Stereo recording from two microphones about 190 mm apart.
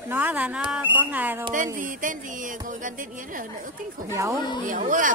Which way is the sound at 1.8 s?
45° right (ahead or behind).